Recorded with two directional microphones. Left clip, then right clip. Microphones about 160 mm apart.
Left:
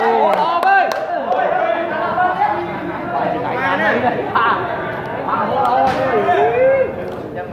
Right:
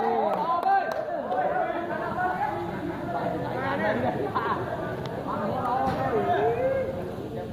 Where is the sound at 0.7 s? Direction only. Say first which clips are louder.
Left 11 dB; 75° left (ahead or behind).